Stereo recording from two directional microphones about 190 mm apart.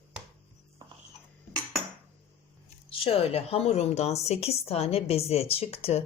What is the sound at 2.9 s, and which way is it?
A woman's voice, 30° left (ahead or behind).